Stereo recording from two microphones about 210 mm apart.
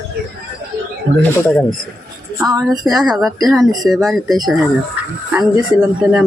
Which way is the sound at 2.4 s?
15° right (ahead or behind).